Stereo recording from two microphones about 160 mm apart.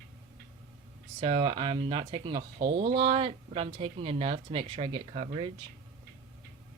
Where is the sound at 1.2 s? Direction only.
30° right (ahead or behind).